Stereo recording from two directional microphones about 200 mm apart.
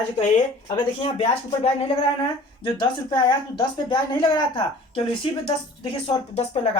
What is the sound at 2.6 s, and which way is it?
Speech, 20° left (ahead or behind).